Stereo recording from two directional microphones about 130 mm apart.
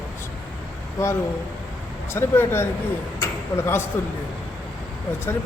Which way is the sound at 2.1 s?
20° left (ahead or behind).